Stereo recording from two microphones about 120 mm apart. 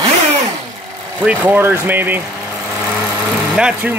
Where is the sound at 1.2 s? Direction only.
15° right (ahead or behind).